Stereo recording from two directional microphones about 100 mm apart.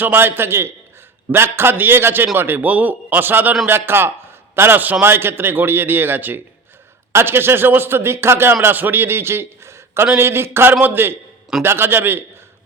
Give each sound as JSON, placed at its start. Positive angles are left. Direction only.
{"t": 0.0, "sound": "a man's voice", "side_deg": -20}